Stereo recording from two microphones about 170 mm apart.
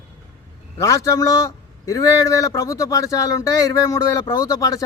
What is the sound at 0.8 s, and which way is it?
Speech, 20° left (ahead or behind).